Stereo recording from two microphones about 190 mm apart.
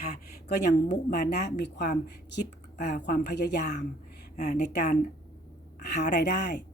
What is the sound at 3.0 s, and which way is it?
Speech, 60° left (ahead or behind).